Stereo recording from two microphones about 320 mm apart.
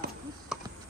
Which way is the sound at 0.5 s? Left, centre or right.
Centre.